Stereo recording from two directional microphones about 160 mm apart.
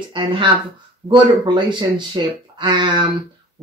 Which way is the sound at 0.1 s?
30° right (ahead or behind).